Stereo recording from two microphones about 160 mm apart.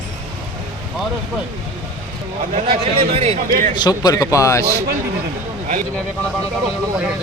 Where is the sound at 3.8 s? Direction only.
25° left (ahead or behind).